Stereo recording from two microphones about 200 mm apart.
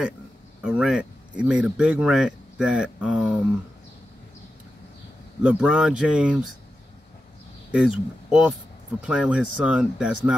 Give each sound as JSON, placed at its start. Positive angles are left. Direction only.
{"t": 0.6, "sound": "speech", "side_deg": -5}
{"t": 5.4, "sound": "speech", "side_deg": -5}
{"t": 7.7, "sound": "speech", "side_deg": -5}